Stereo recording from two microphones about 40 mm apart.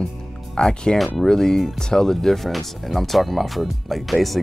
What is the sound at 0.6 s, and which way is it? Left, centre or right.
Speech, centre.